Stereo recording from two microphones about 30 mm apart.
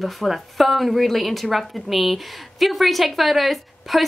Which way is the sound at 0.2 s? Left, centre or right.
Centre.